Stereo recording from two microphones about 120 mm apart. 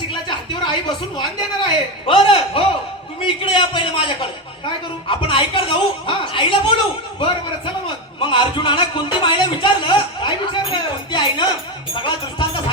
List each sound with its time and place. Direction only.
0.1 s a woman's voice: 40° left (ahead or behind)